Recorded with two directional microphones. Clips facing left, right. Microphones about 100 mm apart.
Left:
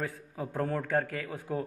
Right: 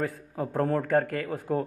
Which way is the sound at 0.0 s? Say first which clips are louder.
Right 5 dB; 45° right (ahead or behind).